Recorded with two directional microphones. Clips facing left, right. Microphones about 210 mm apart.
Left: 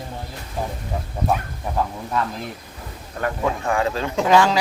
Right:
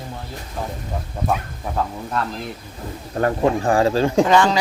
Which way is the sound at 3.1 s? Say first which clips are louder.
Right 5 dB; 35° right (ahead or behind).